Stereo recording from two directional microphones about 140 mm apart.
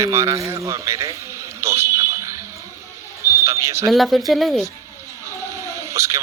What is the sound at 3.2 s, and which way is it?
Basketball bounce, 20° right (ahead or behind).